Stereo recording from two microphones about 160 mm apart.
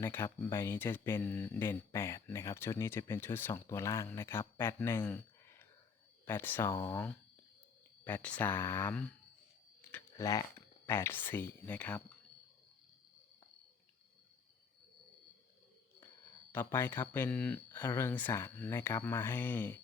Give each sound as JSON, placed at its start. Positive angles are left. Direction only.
{"t": 0.0, "sound": "speech", "side_deg": 15}
{"t": 9.9, "sound": "a sound", "side_deg": 20}
{"t": 10.8, "sound": "speech", "side_deg": 15}
{"t": 16.5, "sound": "speech", "side_deg": 15}